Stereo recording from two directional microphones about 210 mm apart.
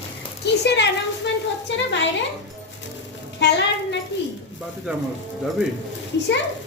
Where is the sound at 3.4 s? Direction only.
55° left (ahead or behind).